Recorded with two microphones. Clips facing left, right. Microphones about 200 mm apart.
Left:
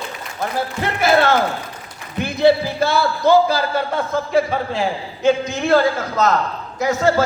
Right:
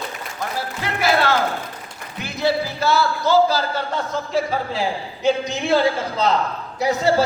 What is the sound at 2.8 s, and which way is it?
A man's voice, 55° left (ahead or behind).